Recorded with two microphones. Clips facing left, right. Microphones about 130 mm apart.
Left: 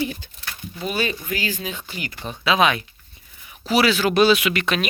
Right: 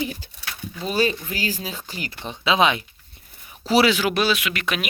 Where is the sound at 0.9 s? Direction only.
35° right (ahead or behind).